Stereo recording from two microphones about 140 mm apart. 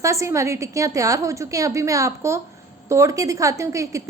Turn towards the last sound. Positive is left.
turn(degrees=-20)  # may be behind; listen again after turning